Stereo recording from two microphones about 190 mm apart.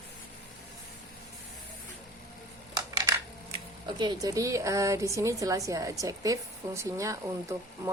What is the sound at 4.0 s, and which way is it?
A woman's voice, 20° right (ahead or behind).